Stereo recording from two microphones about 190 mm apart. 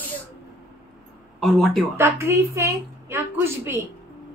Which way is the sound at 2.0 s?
15° right (ahead or behind).